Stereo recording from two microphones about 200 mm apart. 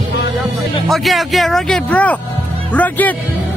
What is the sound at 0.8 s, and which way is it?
Speech, centre (ahead or behind).